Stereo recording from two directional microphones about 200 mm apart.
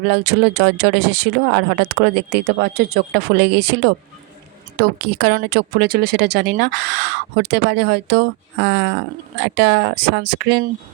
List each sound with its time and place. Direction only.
0.0 s speech: 55° right (ahead or behind)